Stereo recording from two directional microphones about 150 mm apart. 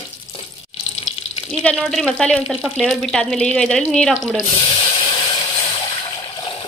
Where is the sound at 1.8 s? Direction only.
Centre (ahead or behind).